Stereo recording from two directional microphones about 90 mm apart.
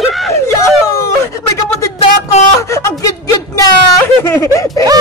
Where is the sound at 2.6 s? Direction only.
35° left (ahead or behind).